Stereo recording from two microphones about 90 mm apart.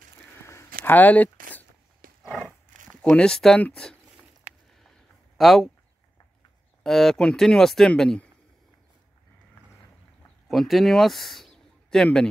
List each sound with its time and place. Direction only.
0.5 s a sound: 30° left (ahead or behind)
0.9 s speech: 20° left (ahead or behind)
2.4 s a sound: 10° left (ahead or behind)
3.6 s speech: 10° left (ahead or behind)
5.4 s speech: centre (ahead or behind)
6.8 s speech: 5° left (ahead or behind)
10.5 s speech: centre (ahead or behind)